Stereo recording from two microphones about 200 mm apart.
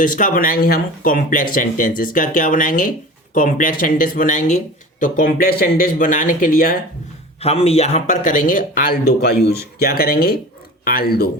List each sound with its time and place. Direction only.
0.0 s speech: 40° left (ahead or behind)
7.4 s speech: 30° left (ahead or behind); by 11.3 s 50° left (ahead or behind)